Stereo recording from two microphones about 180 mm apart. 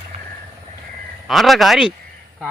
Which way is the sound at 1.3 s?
Centre (ahead or behind).